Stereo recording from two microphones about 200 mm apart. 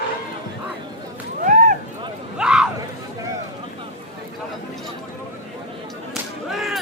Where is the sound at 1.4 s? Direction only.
40° right (ahead or behind).